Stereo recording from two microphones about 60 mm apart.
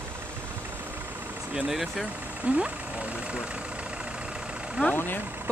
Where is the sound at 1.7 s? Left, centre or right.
Centre.